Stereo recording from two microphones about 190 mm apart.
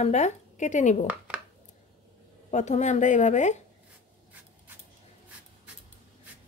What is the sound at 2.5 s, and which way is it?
Speech, 40° left (ahead or behind).